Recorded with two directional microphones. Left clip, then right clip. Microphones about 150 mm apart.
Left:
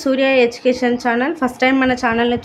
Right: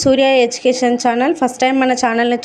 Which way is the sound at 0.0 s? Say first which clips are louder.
Right 3 dB; 30° right (ahead or behind).